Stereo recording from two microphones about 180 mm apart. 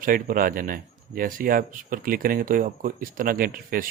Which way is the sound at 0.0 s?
50° right (ahead or behind).